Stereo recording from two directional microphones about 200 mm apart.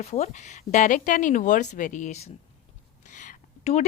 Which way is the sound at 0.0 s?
35° left (ahead or behind).